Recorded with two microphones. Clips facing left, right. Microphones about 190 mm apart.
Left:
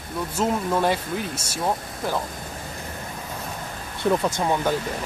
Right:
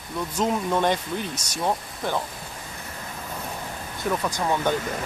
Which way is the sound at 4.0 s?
25° left (ahead or behind).